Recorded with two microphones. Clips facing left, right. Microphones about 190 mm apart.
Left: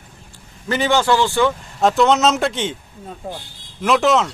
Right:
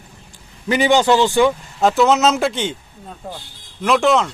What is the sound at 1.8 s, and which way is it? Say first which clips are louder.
Speech: right 1 dB; centre (ahead or behind).